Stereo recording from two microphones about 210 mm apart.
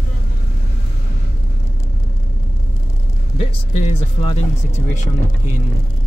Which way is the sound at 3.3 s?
30° left (ahead or behind).